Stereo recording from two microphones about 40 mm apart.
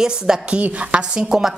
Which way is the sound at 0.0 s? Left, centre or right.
Centre.